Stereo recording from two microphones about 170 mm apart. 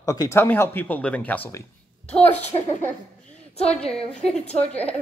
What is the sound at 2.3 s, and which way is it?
Speech, 40° left (ahead or behind).